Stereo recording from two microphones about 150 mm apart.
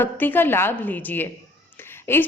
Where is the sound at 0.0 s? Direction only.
15° left (ahead or behind).